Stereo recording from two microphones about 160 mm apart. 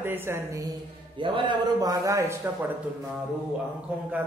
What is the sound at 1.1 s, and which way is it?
A man's voice, 30° right (ahead or behind).